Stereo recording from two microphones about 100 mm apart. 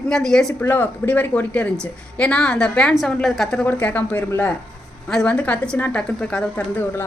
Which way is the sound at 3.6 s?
15° left (ahead or behind).